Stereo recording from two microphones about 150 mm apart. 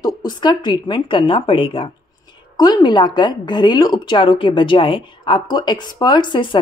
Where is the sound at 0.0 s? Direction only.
30° left (ahead or behind).